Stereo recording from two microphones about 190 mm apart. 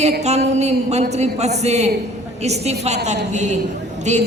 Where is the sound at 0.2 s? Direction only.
35° right (ahead or behind).